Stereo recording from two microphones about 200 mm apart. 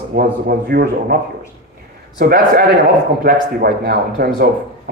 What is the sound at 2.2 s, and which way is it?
A man's voice, 50° right (ahead or behind).